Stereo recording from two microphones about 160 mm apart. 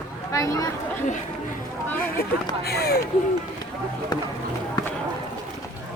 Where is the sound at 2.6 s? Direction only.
80° left.